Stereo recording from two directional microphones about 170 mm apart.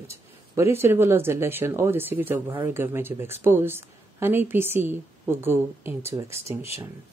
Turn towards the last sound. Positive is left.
turn(degrees=-15)  # may be behind; listen again after turning